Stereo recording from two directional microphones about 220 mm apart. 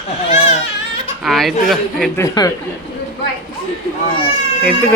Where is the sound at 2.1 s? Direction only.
15° left (ahead or behind).